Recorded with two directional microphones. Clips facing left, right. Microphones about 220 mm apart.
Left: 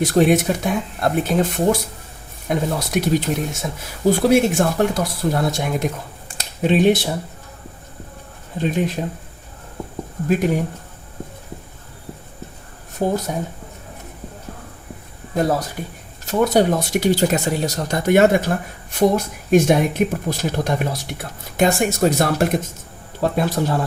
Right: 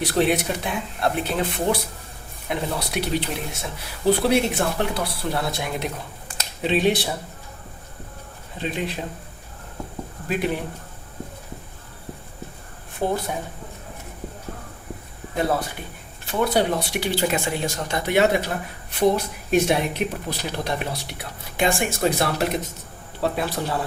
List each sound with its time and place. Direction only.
0.0 s speech: 45° left (ahead or behind)
8.5 s speech: 45° left (ahead or behind)
10.2 s speech: 45° left (ahead or behind)
12.9 s speech: 45° left (ahead or behind)
15.4 s speech: 40° left (ahead or behind)